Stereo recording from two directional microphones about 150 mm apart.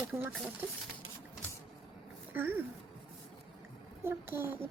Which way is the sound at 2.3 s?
15° right (ahead or behind).